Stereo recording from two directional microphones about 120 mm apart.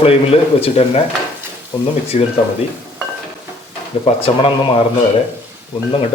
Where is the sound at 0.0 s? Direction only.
55° left (ahead or behind).